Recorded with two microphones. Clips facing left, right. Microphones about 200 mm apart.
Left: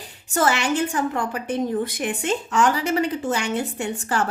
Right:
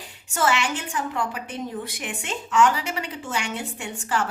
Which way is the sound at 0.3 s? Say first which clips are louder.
Left 4 dB; 40° left (ahead or behind).